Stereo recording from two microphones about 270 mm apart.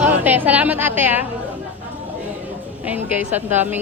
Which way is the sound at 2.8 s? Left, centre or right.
Centre.